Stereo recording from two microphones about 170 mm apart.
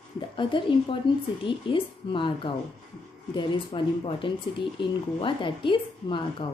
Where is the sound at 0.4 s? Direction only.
30° left (ahead or behind).